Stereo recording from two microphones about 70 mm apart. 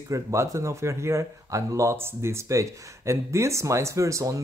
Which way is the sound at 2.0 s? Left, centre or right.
Right.